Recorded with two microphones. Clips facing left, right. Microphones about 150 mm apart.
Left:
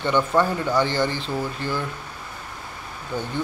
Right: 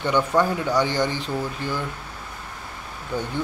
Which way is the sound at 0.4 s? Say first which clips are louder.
Even; 10° right (ahead or behind).